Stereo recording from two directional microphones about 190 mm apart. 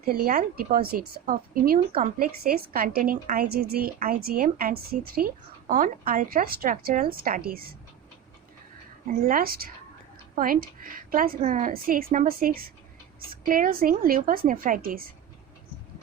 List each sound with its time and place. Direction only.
0.0 s a woman's voice: 50° right (ahead or behind)
9.0 s a woman's voice: 50° right (ahead or behind)